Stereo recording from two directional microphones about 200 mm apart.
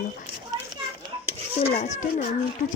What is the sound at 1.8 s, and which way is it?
Speech, 35° left (ahead or behind).